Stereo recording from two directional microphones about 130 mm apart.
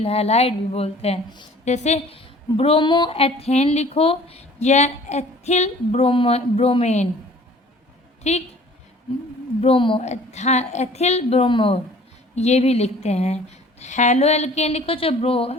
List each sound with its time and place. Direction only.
0.0 s a woman's voice: 50° left (ahead or behind)
1.6 s a woman's voice: 60° left (ahead or behind)
8.2 s a woman's voice: 55° left (ahead or behind)
9.6 s a woman's voice: 45° left (ahead or behind)
10.0 s a woman's voice: 60° left (ahead or behind); by 11.8 s 40° left (ahead or behind)
12.4 s a woman's voice: 55° left (ahead or behind)